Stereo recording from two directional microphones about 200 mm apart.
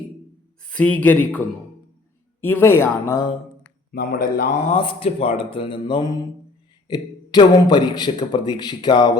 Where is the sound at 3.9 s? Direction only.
45° left (ahead or behind).